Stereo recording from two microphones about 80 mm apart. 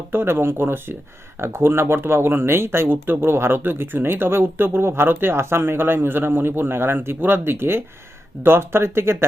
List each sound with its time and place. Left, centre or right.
0.1 s speech: right